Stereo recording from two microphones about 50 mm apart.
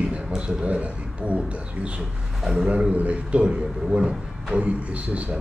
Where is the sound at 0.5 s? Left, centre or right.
Right.